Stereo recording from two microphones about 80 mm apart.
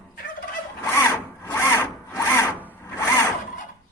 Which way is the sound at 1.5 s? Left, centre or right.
Left.